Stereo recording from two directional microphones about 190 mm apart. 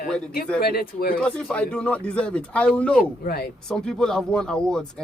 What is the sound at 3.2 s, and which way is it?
Speech, 55° left (ahead or behind).